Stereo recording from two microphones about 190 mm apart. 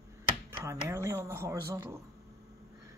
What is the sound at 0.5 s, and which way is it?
Speech, 15° right (ahead or behind).